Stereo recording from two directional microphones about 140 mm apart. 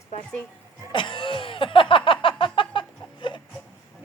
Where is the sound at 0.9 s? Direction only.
35° left (ahead or behind).